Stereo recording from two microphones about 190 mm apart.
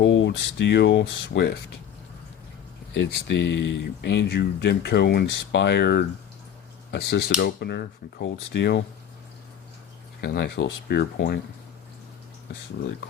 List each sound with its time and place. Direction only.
0.0 s speech: 70° left (ahead or behind)
3.1 s speech: 65° left (ahead or behind)
10.2 s speech: 55° left (ahead or behind)